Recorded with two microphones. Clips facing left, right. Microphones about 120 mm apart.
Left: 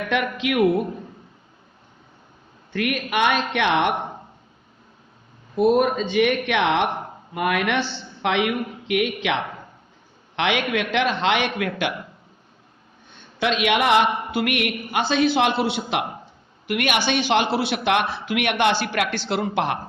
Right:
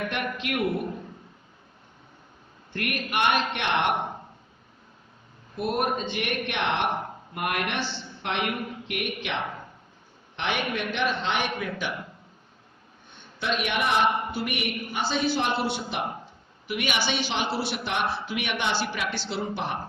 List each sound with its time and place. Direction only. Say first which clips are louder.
0.1 s a woman's voice: left 7 dB; 90° left
2.7 s a woman's voice: left 5 dB; 90° left
6.0 s a woman's voice: left 10 dB; 90° left; by 11.9 s 75° left (ahead or behind)
13.1 s a man's voice: left 6 dB; 90° left
16.6 s a woman's voice: left 6 dB; 65° left (ahead or behind)